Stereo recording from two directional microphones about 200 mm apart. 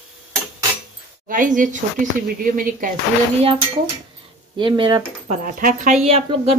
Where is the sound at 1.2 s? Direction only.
40° right (ahead or behind).